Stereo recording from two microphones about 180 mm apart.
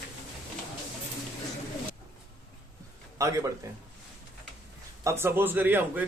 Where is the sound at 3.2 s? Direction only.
15° right (ahead or behind).